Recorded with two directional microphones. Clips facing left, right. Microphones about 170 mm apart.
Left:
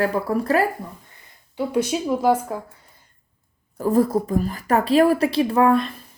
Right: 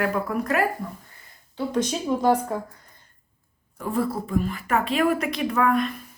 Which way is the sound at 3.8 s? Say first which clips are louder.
Left 7 dB; 40° left (ahead or behind).